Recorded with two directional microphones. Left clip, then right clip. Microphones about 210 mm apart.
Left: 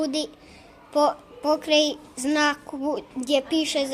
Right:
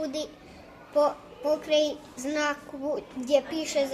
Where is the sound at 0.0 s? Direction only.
45° left (ahead or behind).